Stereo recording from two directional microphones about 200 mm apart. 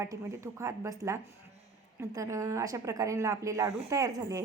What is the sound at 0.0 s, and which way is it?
Speech, 15° right (ahead or behind).